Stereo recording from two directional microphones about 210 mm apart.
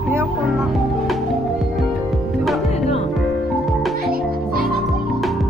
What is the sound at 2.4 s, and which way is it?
Music, centre (ahead or behind).